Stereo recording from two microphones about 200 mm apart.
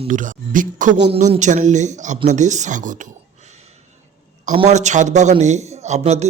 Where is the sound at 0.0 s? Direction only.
40° right (ahead or behind).